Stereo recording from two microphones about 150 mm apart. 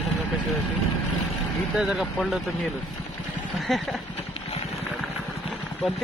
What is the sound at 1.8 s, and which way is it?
Speech, centre (ahead or behind).